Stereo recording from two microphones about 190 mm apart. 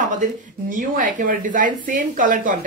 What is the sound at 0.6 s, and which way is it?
A woman's voice, 45° right (ahead or behind).